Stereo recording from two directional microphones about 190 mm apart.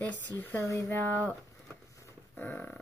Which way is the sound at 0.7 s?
15° left (ahead or behind).